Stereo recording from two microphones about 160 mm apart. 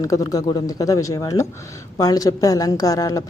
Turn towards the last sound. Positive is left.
turn(degrees=20)  # may be behind; listen again after turning